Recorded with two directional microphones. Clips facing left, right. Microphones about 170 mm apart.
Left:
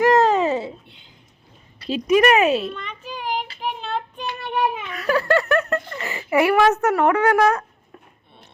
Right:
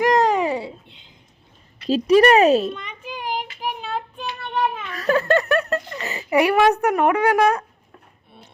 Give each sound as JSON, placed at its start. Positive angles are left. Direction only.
{"t": 0.0, "sound": "babbling", "side_deg": -15}
{"t": 2.0, "sound": "speech", "side_deg": -35}
{"t": 2.7, "sound": "a sound", "side_deg": -15}
{"t": 3.6, "sound": "child singing", "side_deg": -10}
{"t": 4.9, "sound": "giggle", "side_deg": -25}